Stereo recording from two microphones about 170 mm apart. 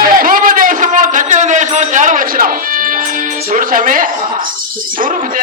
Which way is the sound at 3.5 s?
55° right (ahead or behind).